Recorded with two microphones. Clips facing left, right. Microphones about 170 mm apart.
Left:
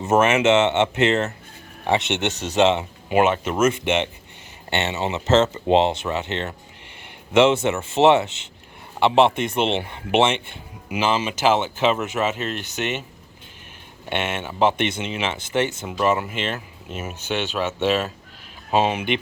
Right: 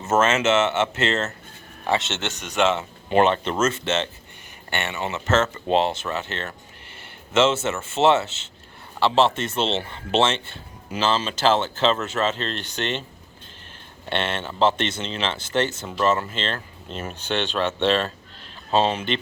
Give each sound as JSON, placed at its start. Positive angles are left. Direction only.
{"t": 0.0, "sound": "speech", "side_deg": 15}
{"t": 14.1, "sound": "speech", "side_deg": 10}